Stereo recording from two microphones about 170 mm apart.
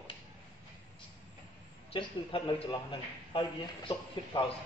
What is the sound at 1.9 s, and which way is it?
Speech, 30° left (ahead or behind).